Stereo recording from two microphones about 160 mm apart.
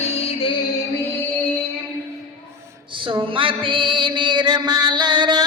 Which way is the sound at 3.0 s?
30° right (ahead or behind).